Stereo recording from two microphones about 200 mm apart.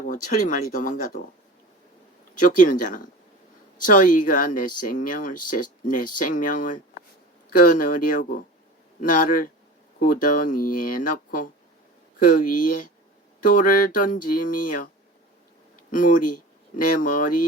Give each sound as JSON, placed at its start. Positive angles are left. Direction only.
{"t": 0.0, "sound": "speech", "side_deg": 40}
{"t": 2.3, "sound": "speech", "side_deg": 40}
{"t": 15.9, "sound": "speech", "side_deg": 40}